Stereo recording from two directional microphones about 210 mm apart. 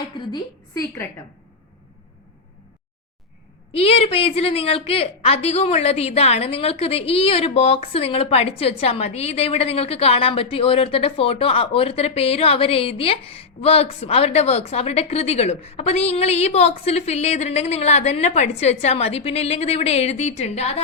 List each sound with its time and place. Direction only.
0.3 s a woman's voice: 20° left (ahead or behind)
3.7 s a woman's voice: 30° left (ahead or behind)